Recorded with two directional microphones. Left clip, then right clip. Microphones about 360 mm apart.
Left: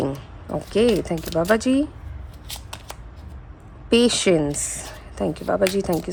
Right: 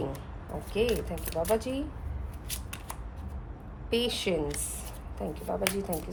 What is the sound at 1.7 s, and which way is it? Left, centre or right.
Speech, left.